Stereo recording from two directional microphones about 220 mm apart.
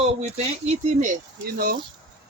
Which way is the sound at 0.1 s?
30° right (ahead or behind).